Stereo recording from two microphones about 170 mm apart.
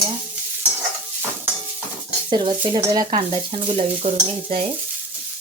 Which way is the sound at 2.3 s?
25° right (ahead or behind).